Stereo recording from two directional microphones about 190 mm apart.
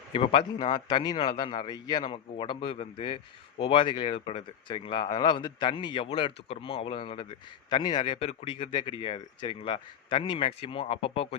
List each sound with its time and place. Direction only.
0.1 s speech: 25° left (ahead or behind)